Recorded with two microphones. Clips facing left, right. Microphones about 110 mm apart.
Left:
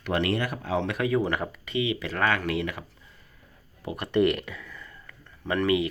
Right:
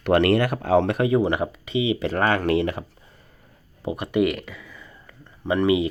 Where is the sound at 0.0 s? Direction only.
65° right (ahead or behind).